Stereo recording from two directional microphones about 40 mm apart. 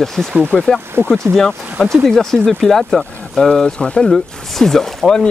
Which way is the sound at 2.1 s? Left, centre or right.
Centre.